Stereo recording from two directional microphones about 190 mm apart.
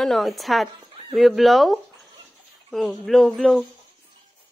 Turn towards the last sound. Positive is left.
turn(degrees=0)  # may be behind; listen again after turning